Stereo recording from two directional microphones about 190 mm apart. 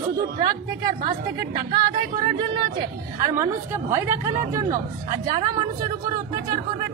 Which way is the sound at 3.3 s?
10° right (ahead or behind).